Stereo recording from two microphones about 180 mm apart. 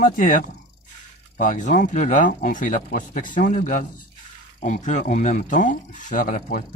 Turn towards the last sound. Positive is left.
turn(degrees=45)  # may be behind; listen again after turning